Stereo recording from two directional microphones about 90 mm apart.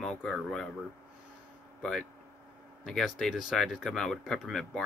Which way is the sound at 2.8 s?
5° left (ahead or behind).